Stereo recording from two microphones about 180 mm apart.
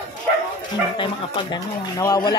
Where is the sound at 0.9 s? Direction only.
25° left (ahead or behind).